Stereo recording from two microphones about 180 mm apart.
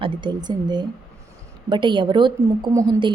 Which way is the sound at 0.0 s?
25° right (ahead or behind).